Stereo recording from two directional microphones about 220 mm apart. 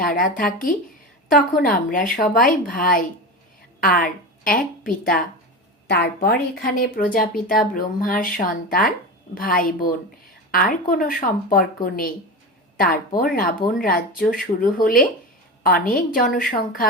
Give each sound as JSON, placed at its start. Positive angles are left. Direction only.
{"t": 0.0, "sound": "speech", "side_deg": 40}
{"t": 1.6, "sound": "speech", "side_deg": 40}
{"t": 6.2, "sound": "speech", "side_deg": 40}